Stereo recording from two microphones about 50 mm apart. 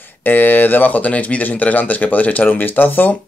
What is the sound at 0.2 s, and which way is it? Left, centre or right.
A man's voice, left.